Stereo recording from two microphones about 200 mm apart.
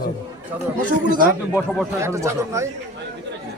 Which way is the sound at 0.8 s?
45° right (ahead or behind).